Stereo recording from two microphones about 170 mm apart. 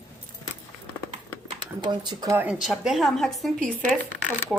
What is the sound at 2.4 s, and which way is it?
A woman's voice, centre (ahead or behind).